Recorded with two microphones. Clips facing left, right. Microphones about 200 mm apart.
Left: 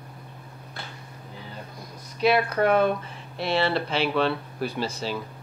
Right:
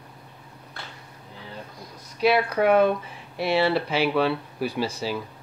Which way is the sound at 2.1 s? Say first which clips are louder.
Right 1 dB; 5° right (ahead or behind).